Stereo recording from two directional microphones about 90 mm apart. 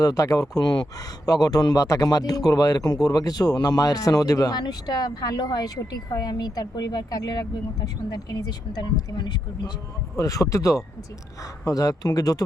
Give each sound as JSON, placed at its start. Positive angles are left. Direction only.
{"t": 0.0, "sound": "speech", "side_deg": 40}
{"t": 10.2, "sound": "speech", "side_deg": 40}